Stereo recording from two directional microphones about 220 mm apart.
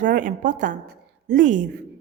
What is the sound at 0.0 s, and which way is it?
A woman's voice, 35° right (ahead or behind).